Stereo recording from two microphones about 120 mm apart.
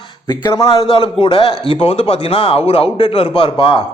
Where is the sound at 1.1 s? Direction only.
50° left (ahead or behind).